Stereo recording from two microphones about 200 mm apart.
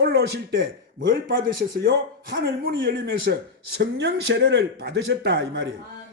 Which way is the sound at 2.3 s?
50° right (ahead or behind).